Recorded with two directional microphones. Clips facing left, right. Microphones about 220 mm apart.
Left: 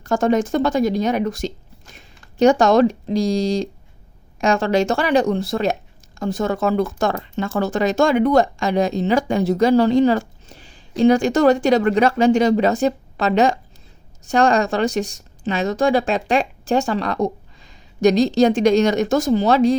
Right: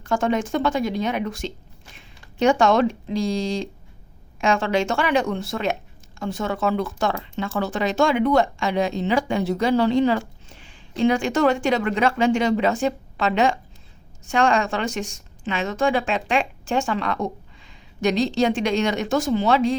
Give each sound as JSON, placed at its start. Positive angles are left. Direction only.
{"t": 0.0, "sound": "speech", "side_deg": 40}